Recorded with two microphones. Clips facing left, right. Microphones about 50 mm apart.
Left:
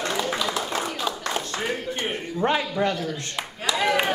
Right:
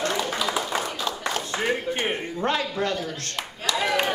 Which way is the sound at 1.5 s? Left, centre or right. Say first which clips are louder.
Right 3 dB; right.